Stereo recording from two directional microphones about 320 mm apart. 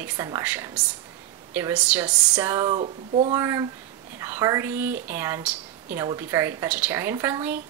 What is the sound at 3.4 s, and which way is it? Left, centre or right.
Speech, centre.